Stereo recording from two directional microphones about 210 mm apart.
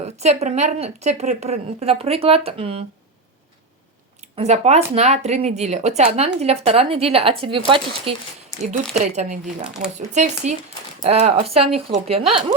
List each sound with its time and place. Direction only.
0.0 s a woman's voice: 30° right (ahead or behind)
4.2 s a woman's voice: 30° right (ahead or behind)
8.7 s a woman's voice: 35° right (ahead or behind)
9.6 s speech: 5° right (ahead or behind)
10.0 s a woman's voice: 35° right (ahead or behind)